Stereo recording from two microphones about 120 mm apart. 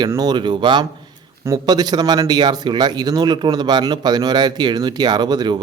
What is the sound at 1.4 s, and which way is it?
Speech, 30° right (ahead or behind).